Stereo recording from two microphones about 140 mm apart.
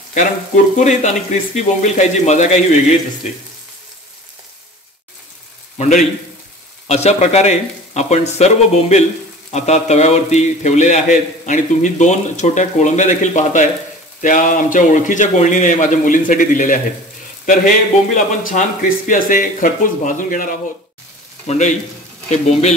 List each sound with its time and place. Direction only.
0.7 s speech: 55° left (ahead or behind)
5.8 s a man's voice: 55° left (ahead or behind); by 20.5 s 70° left (ahead or behind)
21.5 s speech: 55° left (ahead or behind)